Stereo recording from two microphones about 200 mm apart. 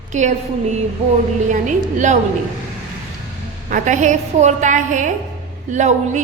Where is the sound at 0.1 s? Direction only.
35° right (ahead or behind).